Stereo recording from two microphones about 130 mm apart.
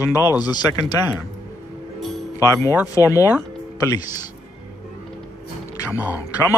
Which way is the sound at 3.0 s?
25° left (ahead or behind).